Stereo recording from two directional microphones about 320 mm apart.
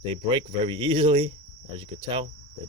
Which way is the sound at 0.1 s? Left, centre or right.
Centre.